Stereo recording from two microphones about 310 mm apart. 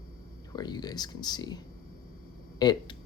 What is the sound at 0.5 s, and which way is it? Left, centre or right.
Speech, centre.